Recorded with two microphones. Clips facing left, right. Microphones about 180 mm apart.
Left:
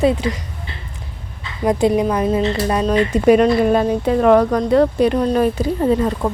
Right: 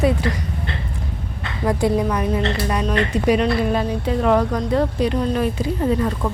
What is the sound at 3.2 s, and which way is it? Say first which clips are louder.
Speech: left 7 dB; 50° left (ahead or behind).